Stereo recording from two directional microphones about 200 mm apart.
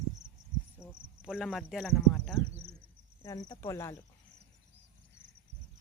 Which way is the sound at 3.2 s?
15° left (ahead or behind).